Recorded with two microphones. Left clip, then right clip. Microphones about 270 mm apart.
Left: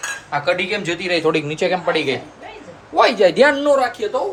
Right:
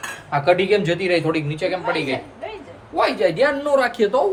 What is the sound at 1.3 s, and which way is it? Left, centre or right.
Speech, left.